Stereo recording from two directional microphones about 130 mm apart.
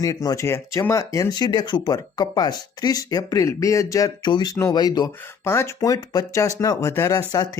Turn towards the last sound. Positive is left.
turn(degrees=30)  # may be behind; listen again after turning